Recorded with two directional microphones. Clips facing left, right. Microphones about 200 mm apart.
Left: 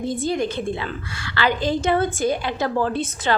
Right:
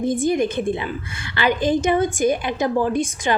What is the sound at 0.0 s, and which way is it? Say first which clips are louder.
A woman's voice: right 4 dB; 15° right (ahead or behind).